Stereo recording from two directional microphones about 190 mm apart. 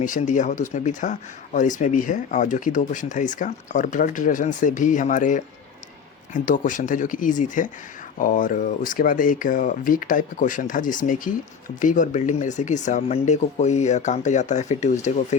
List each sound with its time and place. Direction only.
0.0 s speech: 40° left (ahead or behind)